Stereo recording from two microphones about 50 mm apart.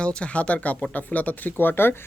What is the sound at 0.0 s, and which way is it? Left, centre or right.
Speech, left.